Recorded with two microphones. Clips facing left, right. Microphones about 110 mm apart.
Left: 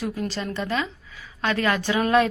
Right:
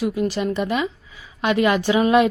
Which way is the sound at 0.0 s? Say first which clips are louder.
Right 7 dB; 15° right (ahead or behind).